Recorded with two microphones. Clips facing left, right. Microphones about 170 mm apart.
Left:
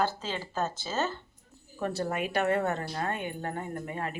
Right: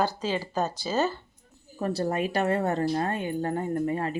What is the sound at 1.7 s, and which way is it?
A woman's voice, 35° right (ahead or behind).